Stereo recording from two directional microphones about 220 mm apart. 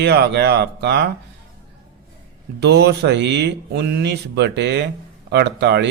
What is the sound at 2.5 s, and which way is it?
A man's voice, 50° right (ahead or behind).